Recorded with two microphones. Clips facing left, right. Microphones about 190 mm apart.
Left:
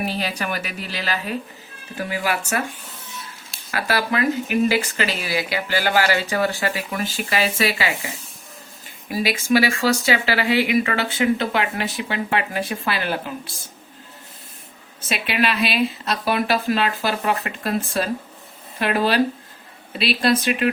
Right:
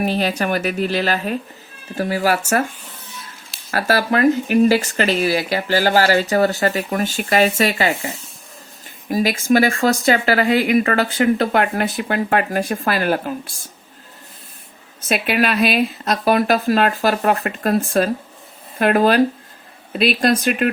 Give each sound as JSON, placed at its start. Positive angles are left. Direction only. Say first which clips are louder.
{"t": 0.0, "sound": "speech", "louder": "right 6 dB", "side_deg": -40}
{"t": 3.7, "sound": "speech", "louder": "right 5 dB", "side_deg": -45}
{"t": 15.1, "sound": "speech", "louder": "right 4 dB", "side_deg": -50}